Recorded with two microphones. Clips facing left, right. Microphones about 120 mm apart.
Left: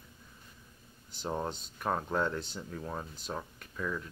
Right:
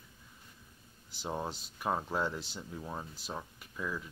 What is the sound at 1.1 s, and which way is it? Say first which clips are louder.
Speech: left 2 dB; 5° right (ahead or behind).